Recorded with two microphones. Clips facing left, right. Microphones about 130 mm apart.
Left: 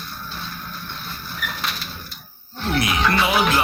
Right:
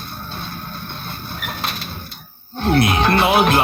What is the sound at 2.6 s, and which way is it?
Speech, 55° right (ahead or behind).